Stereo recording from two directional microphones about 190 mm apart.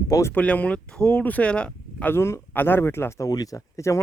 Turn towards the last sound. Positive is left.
turn(degrees=15)  # may be behind; listen again after turning